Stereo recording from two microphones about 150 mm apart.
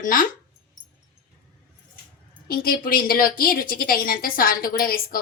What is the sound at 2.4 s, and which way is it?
A woman's voice, 80° left.